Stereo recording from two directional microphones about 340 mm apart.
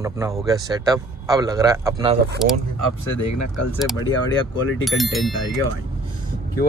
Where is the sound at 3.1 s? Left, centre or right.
Left.